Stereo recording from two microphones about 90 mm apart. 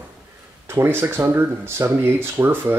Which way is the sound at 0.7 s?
25° right (ahead or behind).